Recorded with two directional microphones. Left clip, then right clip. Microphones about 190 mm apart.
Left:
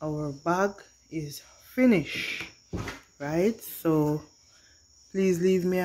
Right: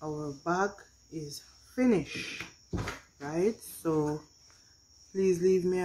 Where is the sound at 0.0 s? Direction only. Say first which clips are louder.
Left 5 dB; 40° left (ahead or behind).